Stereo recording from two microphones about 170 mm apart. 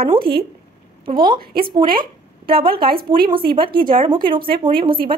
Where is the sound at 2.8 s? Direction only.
60° right (ahead or behind).